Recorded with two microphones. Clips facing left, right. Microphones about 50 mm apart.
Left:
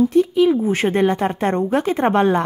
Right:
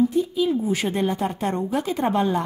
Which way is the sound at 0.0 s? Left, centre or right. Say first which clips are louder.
Left 6 dB; left.